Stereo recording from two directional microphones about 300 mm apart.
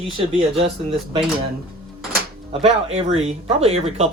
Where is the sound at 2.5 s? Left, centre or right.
Centre.